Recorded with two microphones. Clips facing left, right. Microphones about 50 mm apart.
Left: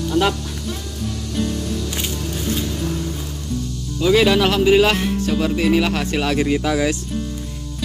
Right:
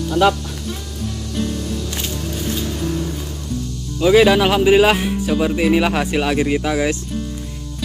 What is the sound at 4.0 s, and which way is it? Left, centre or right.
Speech, centre.